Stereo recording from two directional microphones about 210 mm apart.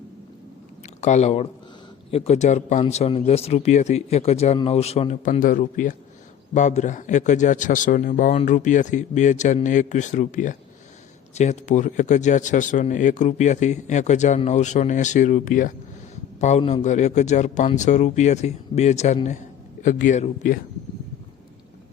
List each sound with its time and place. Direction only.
1.0 s speech: 35° left (ahead or behind)